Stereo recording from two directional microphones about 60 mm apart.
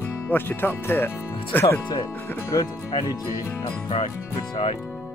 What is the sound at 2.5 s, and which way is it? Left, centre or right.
Speech, left.